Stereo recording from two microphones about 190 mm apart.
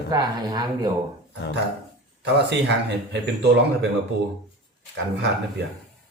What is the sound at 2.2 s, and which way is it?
Speech, 65° right (ahead or behind).